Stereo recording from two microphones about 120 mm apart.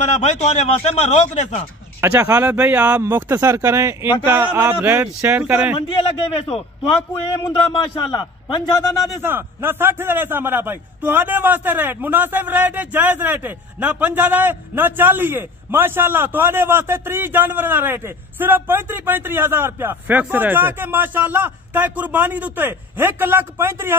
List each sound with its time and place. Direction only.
0.0 s a man's voice: 75° left (ahead or behind)
2.0 s speech: 20° right (ahead or behind)
6.5 s a man's voice: 5° left (ahead or behind)
7.7 s a man's voice: 35° left (ahead or behind)
9.2 s a man's voice: 20° right (ahead or behind)